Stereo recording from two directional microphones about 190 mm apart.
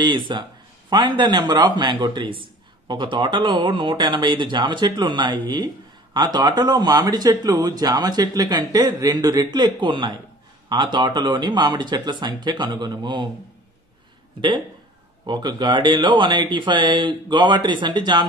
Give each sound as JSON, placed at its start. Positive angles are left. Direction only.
{"t": 0.0, "sound": "a man's voice", "side_deg": -25}
{"t": 15.2, "sound": "speech", "side_deg": -25}